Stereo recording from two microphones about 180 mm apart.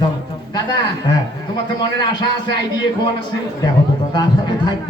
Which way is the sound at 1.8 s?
25° left (ahead or behind).